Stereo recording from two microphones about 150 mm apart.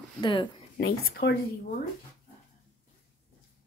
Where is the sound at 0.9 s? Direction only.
90° left.